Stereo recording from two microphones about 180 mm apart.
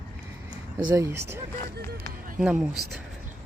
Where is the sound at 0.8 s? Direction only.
20° right (ahead or behind).